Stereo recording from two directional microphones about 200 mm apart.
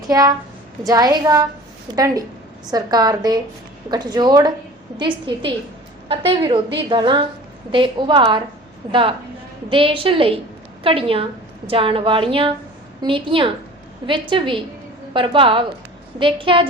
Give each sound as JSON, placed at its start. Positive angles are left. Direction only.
{"t": 0.9, "sound": "a woman's voice", "side_deg": -20}